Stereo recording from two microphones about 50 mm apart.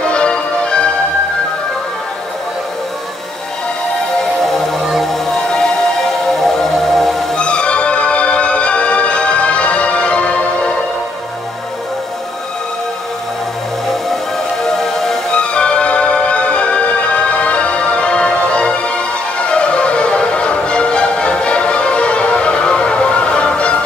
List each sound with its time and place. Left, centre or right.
0.0 s music: left
4.2 s music: centre
7.3 s music: left
14.7 s music: centre
15.3 s music: centre